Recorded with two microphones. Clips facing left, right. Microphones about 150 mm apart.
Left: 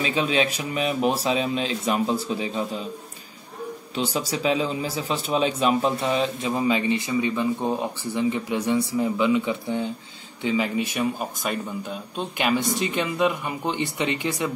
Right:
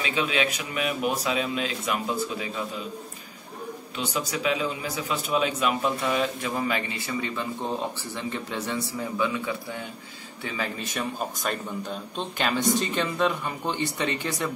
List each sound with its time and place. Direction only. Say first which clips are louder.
0.0 s speech: left 3 dB; 35° left (ahead or behind)
3.9 s a man's voice: left 4 dB; 30° left (ahead or behind); by 14.5 s 15° left (ahead or behind)